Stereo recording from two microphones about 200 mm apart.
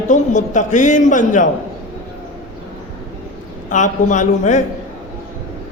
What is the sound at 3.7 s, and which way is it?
Speech, 40° left (ahead or behind).